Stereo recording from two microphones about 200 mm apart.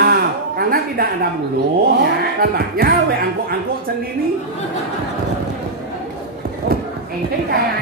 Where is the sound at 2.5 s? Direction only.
50° right (ahead or behind).